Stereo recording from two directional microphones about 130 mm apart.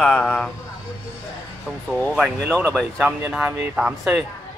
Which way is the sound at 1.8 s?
10° left (ahead or behind).